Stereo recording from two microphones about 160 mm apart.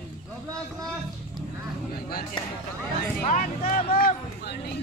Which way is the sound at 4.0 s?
65° left (ahead or behind).